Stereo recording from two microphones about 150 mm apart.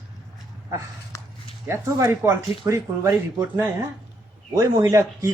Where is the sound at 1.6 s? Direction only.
15° right (ahead or behind).